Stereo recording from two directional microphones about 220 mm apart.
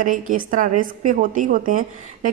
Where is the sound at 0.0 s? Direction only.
35° right (ahead or behind).